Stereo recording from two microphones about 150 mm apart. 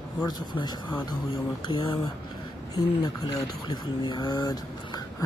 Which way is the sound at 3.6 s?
30° left (ahead or behind).